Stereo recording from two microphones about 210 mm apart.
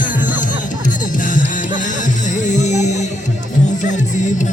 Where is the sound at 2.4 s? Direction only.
35° left (ahead or behind).